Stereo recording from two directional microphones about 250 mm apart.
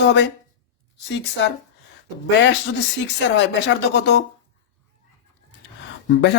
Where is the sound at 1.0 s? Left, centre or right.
Left.